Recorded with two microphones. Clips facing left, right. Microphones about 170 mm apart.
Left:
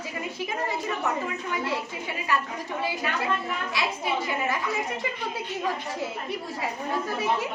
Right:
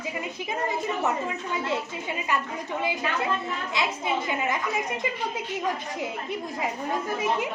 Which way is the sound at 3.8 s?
20° right (ahead or behind).